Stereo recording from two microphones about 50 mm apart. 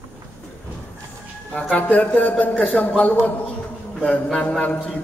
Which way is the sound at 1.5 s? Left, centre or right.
Left.